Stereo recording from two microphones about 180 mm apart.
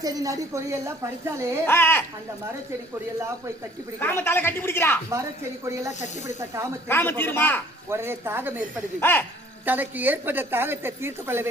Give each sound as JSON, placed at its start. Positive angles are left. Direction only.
{"t": 0.0, "sound": "a woman's voice", "side_deg": -20}
{"t": 1.6, "sound": "a man's voice", "side_deg": 10}
{"t": 4.0, "sound": "a man's voice", "side_deg": 10}
{"t": 6.8, "sound": "a man's voice", "side_deg": 10}
{"t": 7.9, "sound": "a woman's voice", "side_deg": -15}
{"t": 9.0, "sound": "a man's voice", "side_deg": 10}
{"t": 9.6, "sound": "a woman's voice", "side_deg": -10}